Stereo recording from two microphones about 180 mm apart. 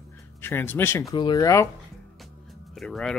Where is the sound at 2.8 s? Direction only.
Centre (ahead or behind).